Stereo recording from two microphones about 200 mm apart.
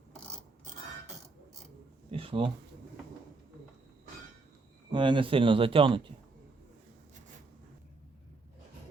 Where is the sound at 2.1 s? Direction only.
25° right (ahead or behind).